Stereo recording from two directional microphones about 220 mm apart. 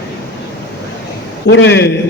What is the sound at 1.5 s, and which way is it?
Speech, 50° left (ahead or behind).